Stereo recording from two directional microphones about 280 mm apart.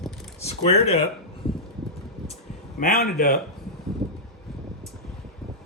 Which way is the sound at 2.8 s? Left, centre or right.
Left.